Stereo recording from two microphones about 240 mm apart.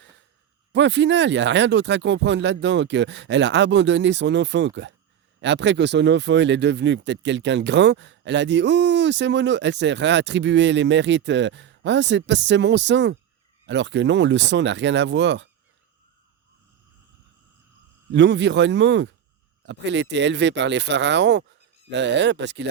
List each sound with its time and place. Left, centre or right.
0.7 s speech: right
18.1 s speech: right